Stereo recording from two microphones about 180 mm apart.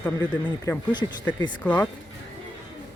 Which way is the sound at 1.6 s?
5° left (ahead or behind).